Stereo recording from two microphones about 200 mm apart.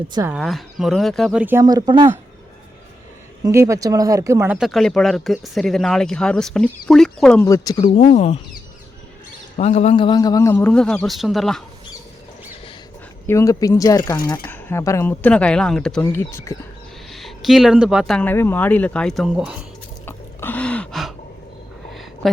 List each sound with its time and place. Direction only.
0.3 s speech: centre (ahead or behind); by 2.1 s 20° right (ahead or behind)
3.4 s speech: 15° right (ahead or behind); by 7.4 s 5° left (ahead or behind)
7.4 s speech: 15° left (ahead or behind)
7.9 s speech: 40° left (ahead or behind)
9.6 s a man's voice: 30° left (ahead or behind); by 11.6 s centre (ahead or behind)
13.2 s a man's voice: 15° left (ahead or behind)
16.3 s a man's voice: 15° left (ahead or behind)
17.1 s speech: centre (ahead or behind)
20.1 s gasp: 10° left (ahead or behind)